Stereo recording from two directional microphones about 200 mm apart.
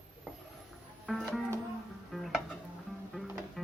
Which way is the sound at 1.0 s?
Centre (ahead or behind).